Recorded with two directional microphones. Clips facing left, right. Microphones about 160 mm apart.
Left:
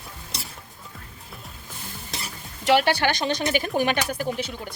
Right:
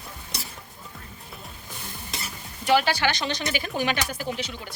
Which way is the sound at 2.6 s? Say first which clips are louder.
Left 2 dB; 65° left (ahead or behind).